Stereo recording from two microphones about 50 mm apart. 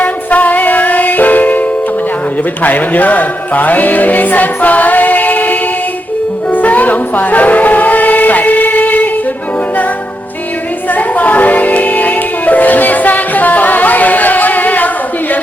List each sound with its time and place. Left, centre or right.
0.0 s music: left
2.6 s music: left
10.9 s music: left